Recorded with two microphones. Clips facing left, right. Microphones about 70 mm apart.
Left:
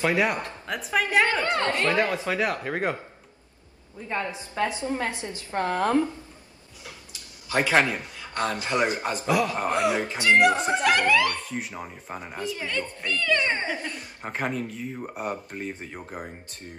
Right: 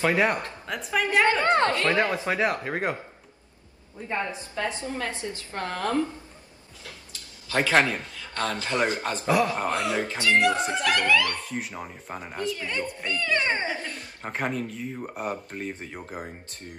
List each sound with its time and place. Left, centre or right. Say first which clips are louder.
0.0 s speech: right 1 dB; centre
0.7 s speech: even; centre
1.4 s speech: right 4 dB; right
1.9 s speech: even; right
4.6 s a man's voice: left 3 dB; left
6.8 s a sound: even; centre
7.7 s speech: right 1 dB; centre
8.0 s a man's voice: left 2 dB; left
9.2 s speech: right 1 dB; right
9.7 s a man's voice: left 2 dB; left
11.4 s speech: even; centre
12.6 s speech: even; centre
14.2 s speech: even; centre